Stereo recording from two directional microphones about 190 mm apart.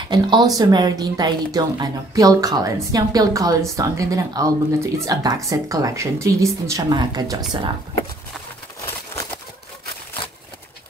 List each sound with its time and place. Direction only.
0.1 s speech: 20° right (ahead or behind)